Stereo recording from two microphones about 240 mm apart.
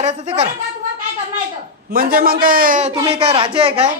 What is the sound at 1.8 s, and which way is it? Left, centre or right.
A woman's voice, right.